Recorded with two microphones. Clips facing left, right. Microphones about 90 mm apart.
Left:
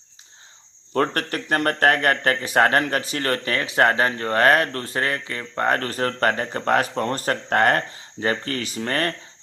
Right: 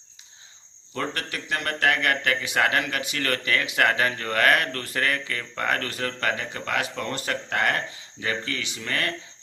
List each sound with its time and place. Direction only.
0.9 s speech: 50° left (ahead or behind)